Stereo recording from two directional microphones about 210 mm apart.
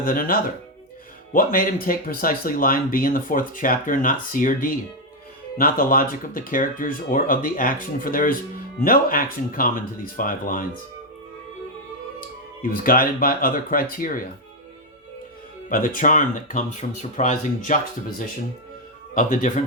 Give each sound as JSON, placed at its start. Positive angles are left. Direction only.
{"t": 0.0, "sound": "speech", "side_deg": 45}
{"t": 12.6, "sound": "speech", "side_deg": 40}
{"t": 15.7, "sound": "speech", "side_deg": 40}
{"t": 19.1, "sound": "speech", "side_deg": 40}